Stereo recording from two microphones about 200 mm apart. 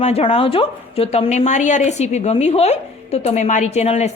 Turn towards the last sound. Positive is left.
turn(degrees=35)  # may be behind; listen again after turning